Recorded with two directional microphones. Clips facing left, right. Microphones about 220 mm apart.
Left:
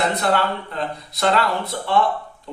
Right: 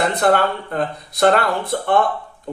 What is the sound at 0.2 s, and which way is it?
Speech, 50° right (ahead or behind).